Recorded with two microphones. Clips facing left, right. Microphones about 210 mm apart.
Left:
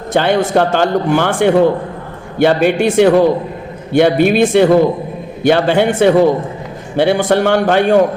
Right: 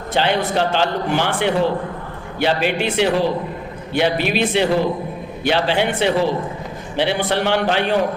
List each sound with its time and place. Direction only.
0.1 s a man's voice: 50° left (ahead or behind)